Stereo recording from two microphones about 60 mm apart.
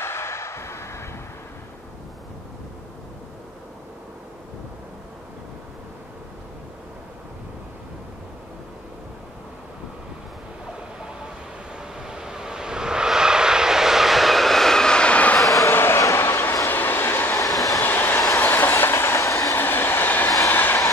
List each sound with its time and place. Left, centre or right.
0.0 s vehicle: left
11.8 s vehicle: centre; by 15.4 s left
15.4 s a sound: left
15.7 s a sound: left
16.0 s a sound: left
16.6 s train: left
17.3 s train: left
17.8 s train: left
19.5 s train: left